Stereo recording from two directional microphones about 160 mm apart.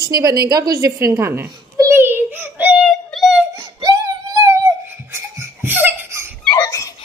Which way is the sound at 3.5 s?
25° right (ahead or behind).